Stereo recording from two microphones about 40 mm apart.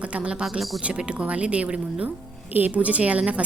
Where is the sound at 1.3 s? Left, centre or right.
Right.